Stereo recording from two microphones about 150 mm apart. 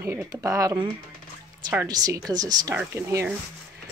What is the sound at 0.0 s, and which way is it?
Speech, 20° right (ahead or behind).